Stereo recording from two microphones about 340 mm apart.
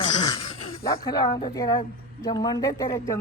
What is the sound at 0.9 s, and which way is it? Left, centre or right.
A woman's voice, centre.